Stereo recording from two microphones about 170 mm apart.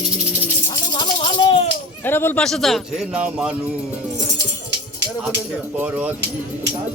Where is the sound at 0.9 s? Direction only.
25° left (ahead or behind).